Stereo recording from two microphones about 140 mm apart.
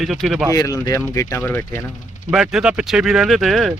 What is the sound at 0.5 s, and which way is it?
Speech, 25° left (ahead or behind).